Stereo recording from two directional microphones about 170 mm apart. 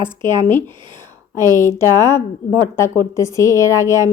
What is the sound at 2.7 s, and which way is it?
A woman's voice, 15° left (ahead or behind).